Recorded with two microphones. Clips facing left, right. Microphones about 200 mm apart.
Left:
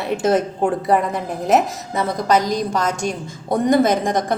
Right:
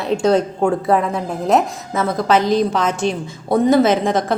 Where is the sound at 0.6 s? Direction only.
Centre (ahead or behind).